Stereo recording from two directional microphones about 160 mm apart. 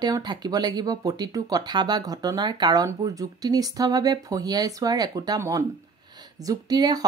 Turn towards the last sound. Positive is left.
turn(degrees=-25)  # may be behind; listen again after turning